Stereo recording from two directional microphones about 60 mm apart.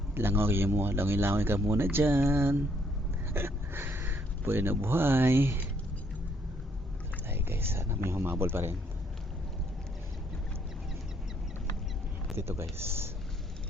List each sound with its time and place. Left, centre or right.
0.1 s a man's voice: right
7.3 s a man's voice: right
12.4 s speech: right